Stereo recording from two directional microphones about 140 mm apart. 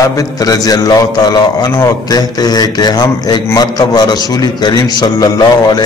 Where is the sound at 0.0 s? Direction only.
25° left (ahead or behind).